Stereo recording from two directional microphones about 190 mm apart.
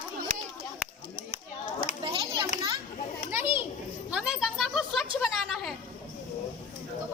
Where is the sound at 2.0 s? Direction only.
25° right (ahead or behind).